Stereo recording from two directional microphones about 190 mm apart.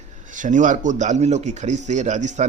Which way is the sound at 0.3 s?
40° right (ahead or behind).